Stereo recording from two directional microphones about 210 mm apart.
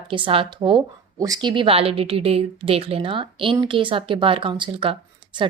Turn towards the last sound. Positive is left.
turn(degrees=-25)  # may be behind; listen again after turning